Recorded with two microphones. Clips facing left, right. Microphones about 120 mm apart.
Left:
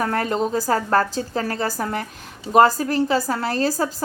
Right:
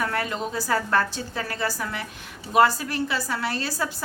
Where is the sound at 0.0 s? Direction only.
40° left (ahead or behind).